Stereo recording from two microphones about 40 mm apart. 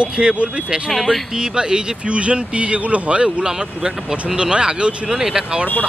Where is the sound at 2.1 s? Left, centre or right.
Right.